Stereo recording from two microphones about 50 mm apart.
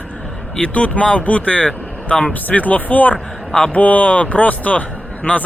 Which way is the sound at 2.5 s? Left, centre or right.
Left.